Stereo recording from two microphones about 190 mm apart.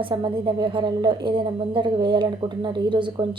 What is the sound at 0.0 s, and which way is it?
A woman's voice, 25° right (ahead or behind).